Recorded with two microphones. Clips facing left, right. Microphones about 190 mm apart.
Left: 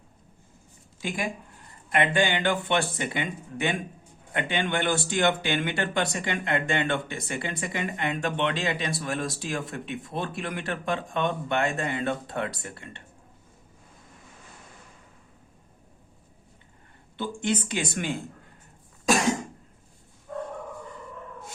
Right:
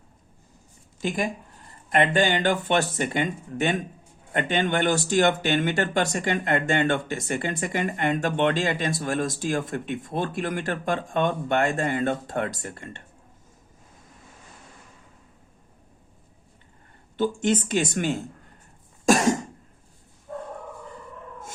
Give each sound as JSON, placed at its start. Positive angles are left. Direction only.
{"t": 1.0, "sound": "speech", "side_deg": -45}
{"t": 17.2, "sound": "speech", "side_deg": -45}